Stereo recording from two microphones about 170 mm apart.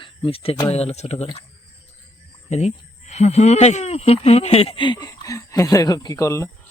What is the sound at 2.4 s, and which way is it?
Speech, 40° left (ahead or behind).